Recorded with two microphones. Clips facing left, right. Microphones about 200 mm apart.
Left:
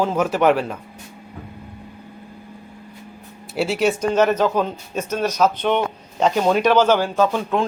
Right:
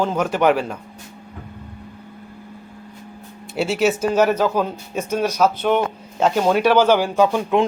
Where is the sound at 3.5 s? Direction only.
Centre (ahead or behind).